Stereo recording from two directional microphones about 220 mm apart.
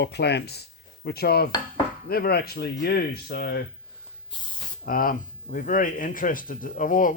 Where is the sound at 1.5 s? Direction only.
20° left (ahead or behind).